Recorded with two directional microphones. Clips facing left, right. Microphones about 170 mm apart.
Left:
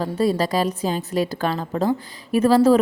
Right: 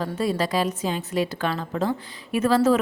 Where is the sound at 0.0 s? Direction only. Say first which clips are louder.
Left 4 dB; 35° left (ahead or behind).